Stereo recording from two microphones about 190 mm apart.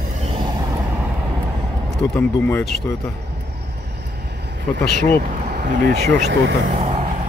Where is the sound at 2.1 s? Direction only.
5° left (ahead or behind).